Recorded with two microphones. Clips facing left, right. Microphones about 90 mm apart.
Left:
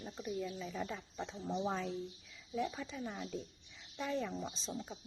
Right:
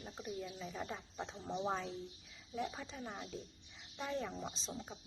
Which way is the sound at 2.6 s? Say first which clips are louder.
Left 3 dB; 35° right (ahead or behind).